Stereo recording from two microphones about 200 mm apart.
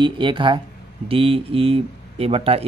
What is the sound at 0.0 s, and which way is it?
Speech, 25° right (ahead or behind).